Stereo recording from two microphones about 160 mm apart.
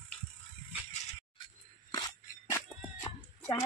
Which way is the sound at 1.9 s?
25° left (ahead or behind).